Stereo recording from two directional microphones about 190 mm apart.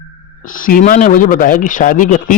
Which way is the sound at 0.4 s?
45° left (ahead or behind).